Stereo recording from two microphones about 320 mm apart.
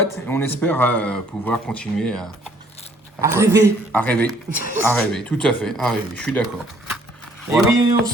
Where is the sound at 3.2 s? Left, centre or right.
Centre.